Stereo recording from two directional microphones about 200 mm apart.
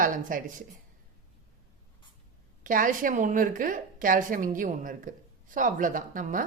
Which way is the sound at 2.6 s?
40° right (ahead or behind).